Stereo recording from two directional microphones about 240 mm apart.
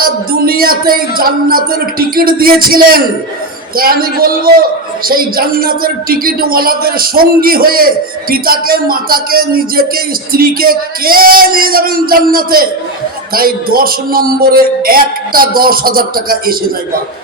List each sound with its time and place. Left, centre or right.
0.0 s speech: right
3.8 s speech: right